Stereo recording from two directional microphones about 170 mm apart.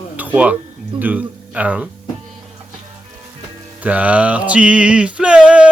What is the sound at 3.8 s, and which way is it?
Male singing, 10° right (ahead or behind).